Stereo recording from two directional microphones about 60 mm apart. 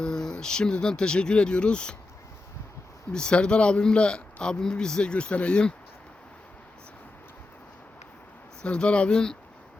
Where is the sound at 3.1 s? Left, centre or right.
Centre.